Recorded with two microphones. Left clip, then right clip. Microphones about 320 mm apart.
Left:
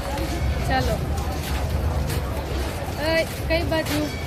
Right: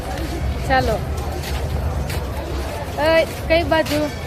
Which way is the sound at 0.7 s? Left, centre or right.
Right.